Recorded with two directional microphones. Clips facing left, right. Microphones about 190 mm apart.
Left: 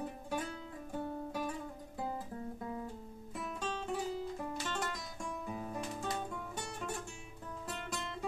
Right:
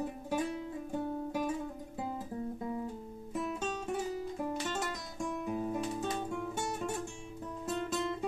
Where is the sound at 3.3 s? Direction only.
20° right (ahead or behind).